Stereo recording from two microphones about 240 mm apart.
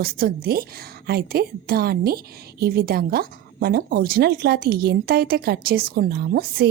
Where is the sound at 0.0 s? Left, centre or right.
Right.